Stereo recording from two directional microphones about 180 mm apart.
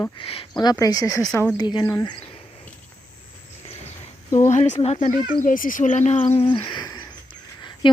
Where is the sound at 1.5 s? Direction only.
25° left (ahead or behind).